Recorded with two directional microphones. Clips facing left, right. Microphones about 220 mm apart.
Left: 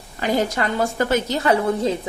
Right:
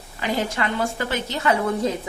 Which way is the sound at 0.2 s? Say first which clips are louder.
Left 4 dB; 40° left (ahead or behind).